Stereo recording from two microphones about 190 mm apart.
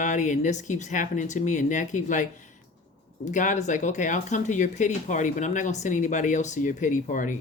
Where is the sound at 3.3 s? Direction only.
40° left (ahead or behind).